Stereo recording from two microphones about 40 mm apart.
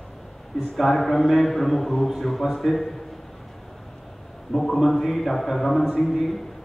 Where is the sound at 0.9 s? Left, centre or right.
Centre.